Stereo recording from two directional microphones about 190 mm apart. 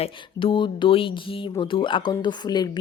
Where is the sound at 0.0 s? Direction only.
30° left (ahead or behind).